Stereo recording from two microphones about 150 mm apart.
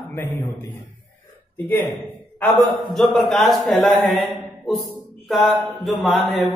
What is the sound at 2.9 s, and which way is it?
A man's voice, centre (ahead or behind).